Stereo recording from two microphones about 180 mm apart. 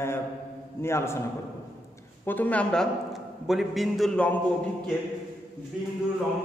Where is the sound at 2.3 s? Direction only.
10° left (ahead or behind).